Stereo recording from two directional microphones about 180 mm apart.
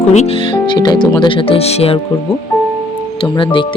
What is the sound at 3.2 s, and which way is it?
Speech, 30° left (ahead or behind).